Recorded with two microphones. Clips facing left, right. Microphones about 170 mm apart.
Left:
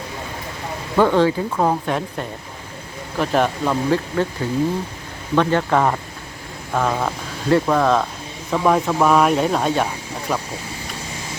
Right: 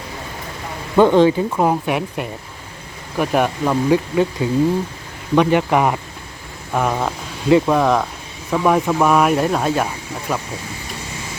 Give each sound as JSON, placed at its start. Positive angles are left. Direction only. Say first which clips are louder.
{"t": 0.9, "sound": "speech", "louder": "right 4 dB", "side_deg": -20}
{"t": 8.4, "sound": "speech", "louder": "right 1 dB", "side_deg": -5}